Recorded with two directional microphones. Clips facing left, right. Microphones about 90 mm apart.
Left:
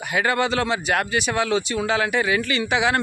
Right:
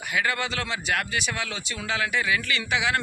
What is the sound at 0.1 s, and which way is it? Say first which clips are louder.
Speech: left 6 dB; 35° left (ahead or behind).